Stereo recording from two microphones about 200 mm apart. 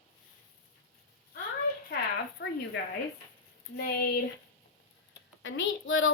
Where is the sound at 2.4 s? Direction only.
65° left (ahead or behind).